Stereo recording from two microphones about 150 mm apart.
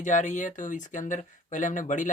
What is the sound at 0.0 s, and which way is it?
Speech, 55° left (ahead or behind).